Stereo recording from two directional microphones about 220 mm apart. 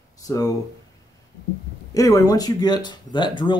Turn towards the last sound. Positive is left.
turn(degrees=20)  # may be behind; listen again after turning